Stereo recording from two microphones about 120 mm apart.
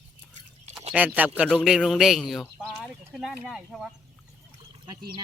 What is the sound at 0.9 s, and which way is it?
Speech, 10° right (ahead or behind).